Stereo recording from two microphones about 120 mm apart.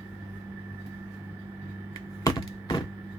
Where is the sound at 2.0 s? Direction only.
30° left (ahead or behind).